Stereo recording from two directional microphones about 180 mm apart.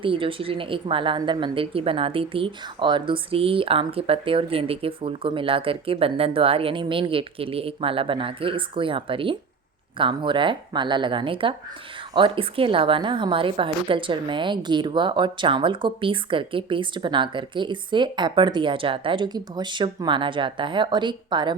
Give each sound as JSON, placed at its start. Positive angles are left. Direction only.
{"t": 0.0, "sound": "a woman's voice", "side_deg": -30}